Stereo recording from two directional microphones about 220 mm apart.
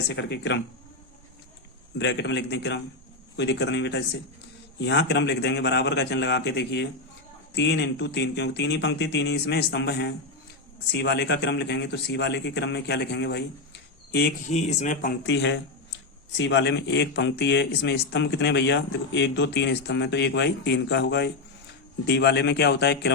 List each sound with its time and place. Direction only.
0.1 s speech: 50° left (ahead or behind)
2.0 s speech: 50° left (ahead or behind)
14.5 s speech: 30° left (ahead or behind)
15.3 s speech: 55° left (ahead or behind)